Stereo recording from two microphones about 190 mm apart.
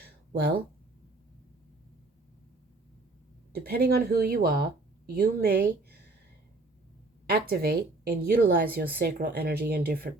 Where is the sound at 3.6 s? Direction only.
55° right (ahead or behind).